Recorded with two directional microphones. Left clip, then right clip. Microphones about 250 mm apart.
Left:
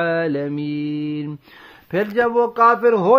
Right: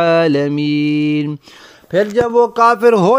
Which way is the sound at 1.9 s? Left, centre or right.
Centre.